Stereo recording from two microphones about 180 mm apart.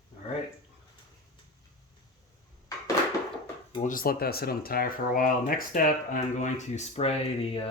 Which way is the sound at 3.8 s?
50° left (ahead or behind).